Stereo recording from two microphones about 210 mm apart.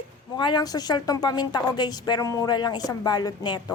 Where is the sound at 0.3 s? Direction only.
20° left (ahead or behind).